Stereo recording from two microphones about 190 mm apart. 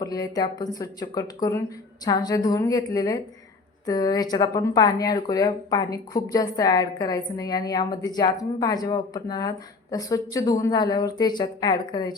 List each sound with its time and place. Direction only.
0.0 s speech: 20° left (ahead or behind)